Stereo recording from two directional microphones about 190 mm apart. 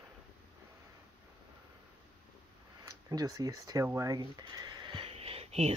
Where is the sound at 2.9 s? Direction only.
20° right (ahead or behind); by 5.7 s 35° right (ahead or behind).